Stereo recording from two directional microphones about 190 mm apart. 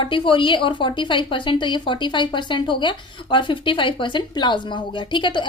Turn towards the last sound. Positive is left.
turn(degrees=25)  # may be behind; listen again after turning